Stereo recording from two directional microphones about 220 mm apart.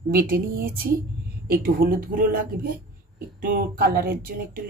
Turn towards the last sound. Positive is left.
turn(degrees=-45)  # may be behind; listen again after turning